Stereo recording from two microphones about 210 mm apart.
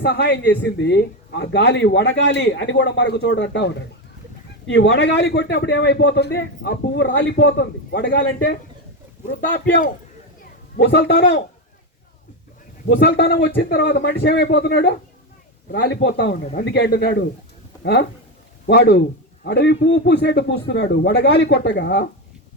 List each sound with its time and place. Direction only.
0.0 s a man's voice: 50° left (ahead or behind)
10.8 s a man's voice: 55° left (ahead or behind)
12.9 s a man's voice: 55° left (ahead or behind)
18.6 s speech: 50° left (ahead or behind)